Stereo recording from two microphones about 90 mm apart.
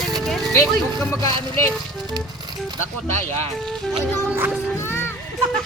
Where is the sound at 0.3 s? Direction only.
Centre (ahead or behind).